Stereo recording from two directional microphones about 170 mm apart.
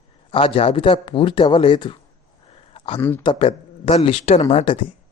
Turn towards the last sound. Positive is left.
turn(degrees=35)  # may be behind; listen again after turning